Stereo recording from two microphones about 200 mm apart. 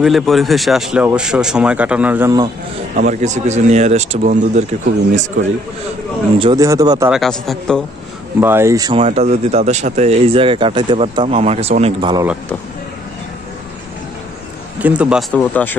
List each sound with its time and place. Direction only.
0.0 s speech: centre (ahead or behind); by 2.5 s 15° right (ahead or behind)
3.1 s speech: 35° right (ahead or behind)
6.4 s speech: 15° right (ahead or behind)
7.1 s speech: centre (ahead or behind)
8.4 s speech: 10° right (ahead or behind)
9.0 s speech: 35° right (ahead or behind)
14.8 s speech: 5° right (ahead or behind)
15.3 s speech: 10° left (ahead or behind)